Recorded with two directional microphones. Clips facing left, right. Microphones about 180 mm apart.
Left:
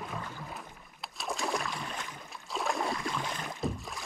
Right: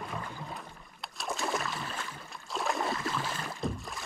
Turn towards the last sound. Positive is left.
turn(degrees=0)  # may be behind; listen again after turning